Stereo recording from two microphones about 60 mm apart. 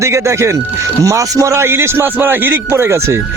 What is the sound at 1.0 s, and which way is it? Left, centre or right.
A man's voice, right.